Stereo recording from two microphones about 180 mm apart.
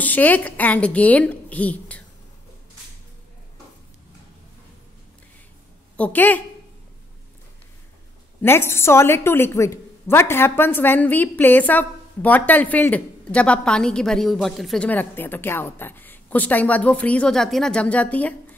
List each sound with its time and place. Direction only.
0.0 s a woman's voice: 10° left (ahead or behind)
5.9 s a woman's voice: 10° left (ahead or behind)
8.4 s a woman's voice: 15° left (ahead or behind)